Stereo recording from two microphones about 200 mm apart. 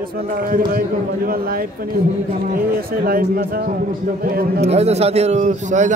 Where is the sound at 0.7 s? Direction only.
45° right (ahead or behind).